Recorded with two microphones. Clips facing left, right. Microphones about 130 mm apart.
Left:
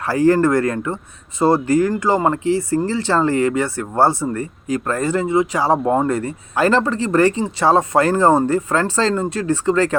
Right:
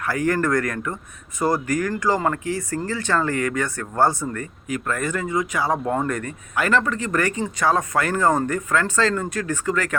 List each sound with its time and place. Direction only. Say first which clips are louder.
0.0 s speech: left 7 dB; 30° left (ahead or behind)